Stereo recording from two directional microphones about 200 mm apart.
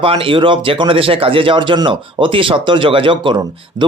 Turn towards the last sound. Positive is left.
turn(degrees=-25)  # may be behind; listen again after turning